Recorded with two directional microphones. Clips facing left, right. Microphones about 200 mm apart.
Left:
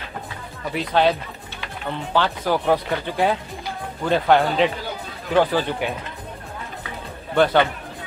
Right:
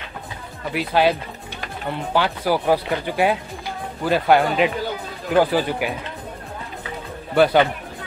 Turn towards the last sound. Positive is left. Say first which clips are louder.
# right 2 dB
turn(degrees=-10)  # may be behind; listen again after turning